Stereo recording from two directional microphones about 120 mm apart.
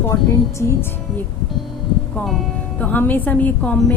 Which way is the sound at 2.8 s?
15° left (ahead or behind).